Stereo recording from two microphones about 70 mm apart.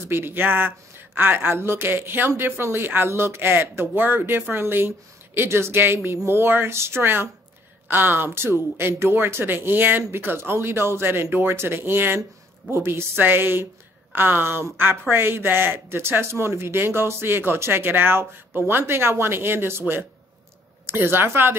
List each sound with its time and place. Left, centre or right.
0.1 s speech: right